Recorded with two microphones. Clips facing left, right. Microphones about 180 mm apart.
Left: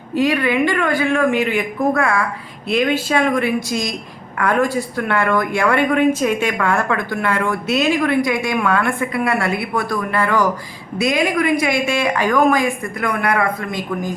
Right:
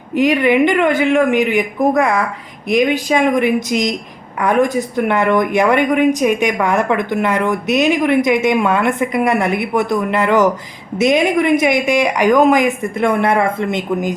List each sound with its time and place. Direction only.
0.1 s speech: 20° right (ahead or behind)